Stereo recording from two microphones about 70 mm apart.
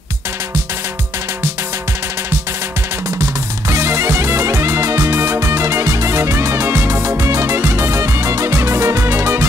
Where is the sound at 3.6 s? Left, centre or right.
Right.